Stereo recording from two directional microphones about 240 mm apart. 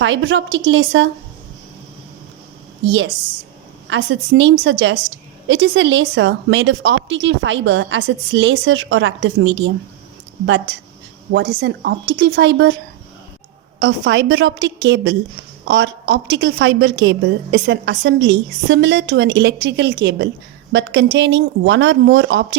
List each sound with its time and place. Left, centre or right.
0.0 s a woman's voice: right
3.8 s a woman's voice: right
11.3 s a woman's voice: right
13.7 s a woman's voice: right